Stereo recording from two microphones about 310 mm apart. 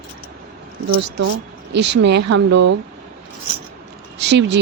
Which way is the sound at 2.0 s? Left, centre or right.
Right.